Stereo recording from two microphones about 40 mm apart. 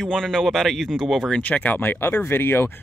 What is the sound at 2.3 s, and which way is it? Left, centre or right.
Speech, left.